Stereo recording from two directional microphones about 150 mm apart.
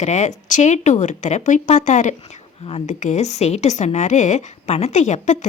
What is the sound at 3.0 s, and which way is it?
A woman's voice, 50° left (ahead or behind).